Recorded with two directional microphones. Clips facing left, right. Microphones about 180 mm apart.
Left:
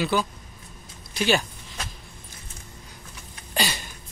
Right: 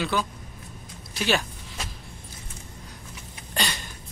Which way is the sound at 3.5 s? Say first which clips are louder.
Left 2 dB; 5° left (ahead or behind).